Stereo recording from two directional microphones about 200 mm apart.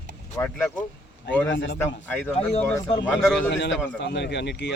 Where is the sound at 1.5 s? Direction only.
65° left (ahead or behind).